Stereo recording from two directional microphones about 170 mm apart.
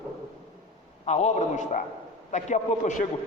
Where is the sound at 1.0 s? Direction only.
40° left (ahead or behind).